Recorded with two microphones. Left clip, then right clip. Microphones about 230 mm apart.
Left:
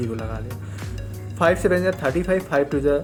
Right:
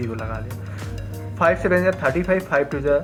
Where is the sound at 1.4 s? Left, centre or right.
Left.